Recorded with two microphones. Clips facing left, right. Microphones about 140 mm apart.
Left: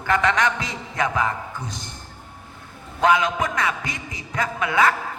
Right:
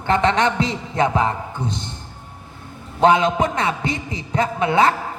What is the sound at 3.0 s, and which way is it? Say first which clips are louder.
Music: right 4 dB; 25° right (ahead or behind).